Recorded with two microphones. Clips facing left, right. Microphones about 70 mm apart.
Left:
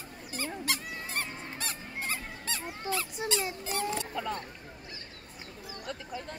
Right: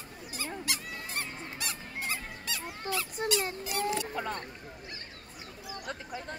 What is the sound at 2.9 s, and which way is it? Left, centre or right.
Speech, right.